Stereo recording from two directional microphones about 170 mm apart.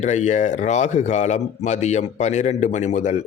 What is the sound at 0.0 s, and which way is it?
Speech, 45° left (ahead or behind).